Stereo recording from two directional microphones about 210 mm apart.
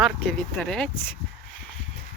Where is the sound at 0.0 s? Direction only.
5° left (ahead or behind).